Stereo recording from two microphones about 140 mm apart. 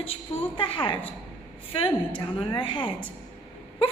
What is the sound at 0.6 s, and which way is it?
A woman's voice, 35° left (ahead or behind).